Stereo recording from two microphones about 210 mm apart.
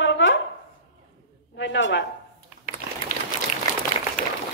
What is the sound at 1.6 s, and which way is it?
Speech, 55° left (ahead or behind).